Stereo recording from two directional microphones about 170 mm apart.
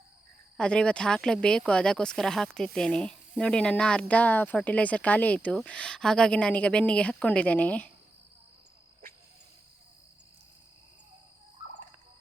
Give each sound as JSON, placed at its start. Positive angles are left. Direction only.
{"t": 0.5, "sound": "speech", "side_deg": 5}